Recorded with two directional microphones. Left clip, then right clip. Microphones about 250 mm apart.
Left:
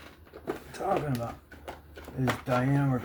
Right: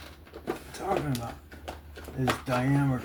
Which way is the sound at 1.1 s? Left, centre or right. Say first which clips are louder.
Left 1 dB; centre.